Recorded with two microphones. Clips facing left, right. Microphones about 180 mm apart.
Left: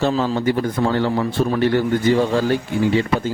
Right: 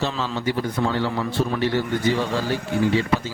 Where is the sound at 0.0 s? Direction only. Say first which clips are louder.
Left 6 dB; 50° left (ahead or behind).